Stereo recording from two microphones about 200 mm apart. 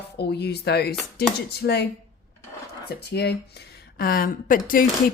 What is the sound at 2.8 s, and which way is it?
Speech, 55° left (ahead or behind).